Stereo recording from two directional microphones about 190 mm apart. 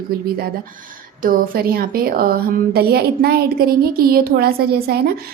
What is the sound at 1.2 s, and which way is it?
A woman's voice, 50° right (ahead or behind).